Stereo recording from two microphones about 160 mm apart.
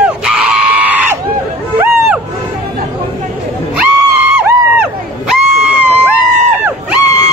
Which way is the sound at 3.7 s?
10° right (ahead or behind).